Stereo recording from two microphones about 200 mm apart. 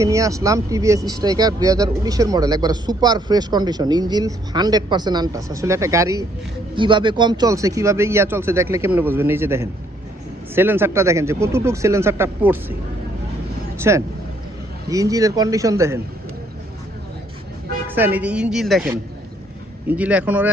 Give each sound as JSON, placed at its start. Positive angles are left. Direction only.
{"t": 0.0, "sound": "a man's voice", "side_deg": -15}
{"t": 13.7, "sound": "a man's voice", "side_deg": -15}
{"t": 17.8, "sound": "a man's voice", "side_deg": -10}